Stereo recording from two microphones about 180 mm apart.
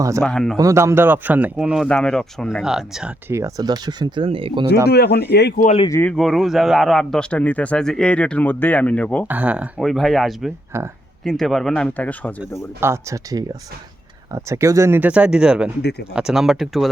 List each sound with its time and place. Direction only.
0.2 s speech: 5° left (ahead or behind)
0.5 s speech: 15° right (ahead or behind)
4.9 s speech: 65° left (ahead or behind)
5.6 s speech: 30° left (ahead or behind)
5.9 s a man's voice: 10° left (ahead or behind)
9.2 s speech: 10° right (ahead or behind)
10.7 s speech: 15° right (ahead or behind)
11.2 s speech: centre (ahead or behind)
12.4 s speech: 15° right (ahead or behind)
15.8 s speech: 65° left (ahead or behind)
16.1 s speech: 5° right (ahead or behind)